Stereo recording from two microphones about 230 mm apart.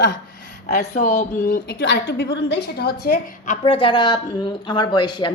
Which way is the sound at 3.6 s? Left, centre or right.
Left.